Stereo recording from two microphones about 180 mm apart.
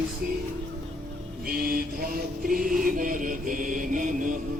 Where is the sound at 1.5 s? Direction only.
55° right (ahead or behind).